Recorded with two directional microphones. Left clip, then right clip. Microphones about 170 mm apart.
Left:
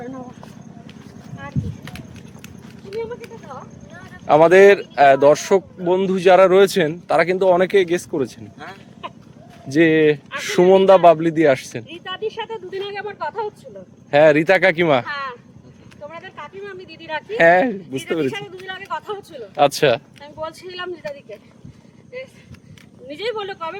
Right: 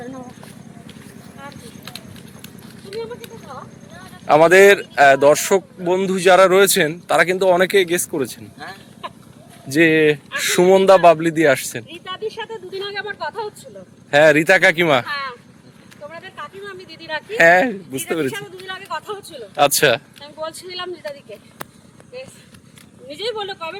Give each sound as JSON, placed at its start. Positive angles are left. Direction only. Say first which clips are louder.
{"t": 0.0, "sound": "a sound", "louder": "even", "side_deg": 5}
{"t": 2.9, "sound": "clip-clop", "louder": "left 1 dB", "side_deg": 0}
{"t": 3.5, "sound": "speech", "louder": "even", "side_deg": 5}
{"t": 9.7, "sound": "speech", "louder": "right 1 dB", "side_deg": 10}
{"t": 14.1, "sound": "speech", "louder": "right 1 dB", "side_deg": 10}
{"t": 15.0, "sound": "a sound", "louder": "right 1 dB", "side_deg": -5}
{"t": 16.0, "sound": "vehicle", "louder": "right 1 dB", "side_deg": -5}
{"t": 16.8, "sound": "speech", "louder": "right 1 dB", "side_deg": 30}
{"t": 17.1, "sound": "speech", "louder": "even", "side_deg": 0}
{"t": 17.3, "sound": "speech", "louder": "right 1 dB", "side_deg": 10}
{"t": 18.3, "sound": "speech", "louder": "even", "side_deg": -10}
{"t": 19.5, "sound": "speech", "louder": "right 1 dB", "side_deg": 10}
{"t": 20.6, "sound": "speech", "louder": "right 1 dB", "side_deg": -5}
{"t": 23.1, "sound": "speech", "louder": "even", "side_deg": -5}